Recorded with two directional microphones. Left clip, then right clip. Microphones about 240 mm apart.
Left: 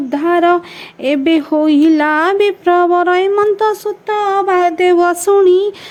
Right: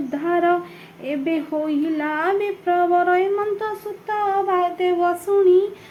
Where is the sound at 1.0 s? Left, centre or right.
Left.